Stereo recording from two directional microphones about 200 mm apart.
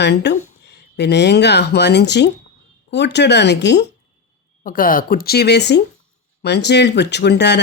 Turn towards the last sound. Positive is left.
turn(degrees=60)  # may be behind; listen again after turning